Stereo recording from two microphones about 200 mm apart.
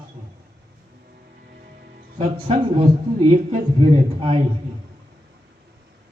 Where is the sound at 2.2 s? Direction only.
30° right (ahead or behind).